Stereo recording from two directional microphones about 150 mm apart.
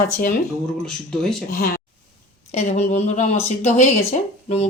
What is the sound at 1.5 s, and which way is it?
Speech, 70° left (ahead or behind).